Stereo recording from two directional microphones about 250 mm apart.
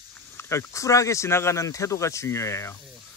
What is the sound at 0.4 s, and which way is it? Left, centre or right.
Speech, centre.